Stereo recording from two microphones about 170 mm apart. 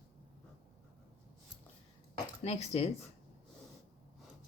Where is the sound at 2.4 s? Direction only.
40° left (ahead or behind).